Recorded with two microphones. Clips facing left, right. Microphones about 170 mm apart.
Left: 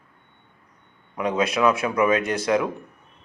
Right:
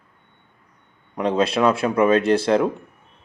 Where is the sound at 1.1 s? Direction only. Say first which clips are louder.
Right 3 dB; 30° right (ahead or behind).